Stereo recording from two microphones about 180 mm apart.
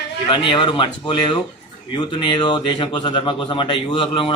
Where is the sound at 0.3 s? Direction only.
30° left (ahead or behind).